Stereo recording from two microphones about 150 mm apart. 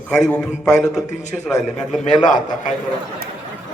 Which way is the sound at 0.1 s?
5° left (ahead or behind).